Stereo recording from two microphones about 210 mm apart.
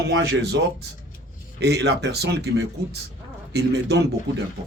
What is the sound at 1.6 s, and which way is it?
Speech, 55° right (ahead or behind).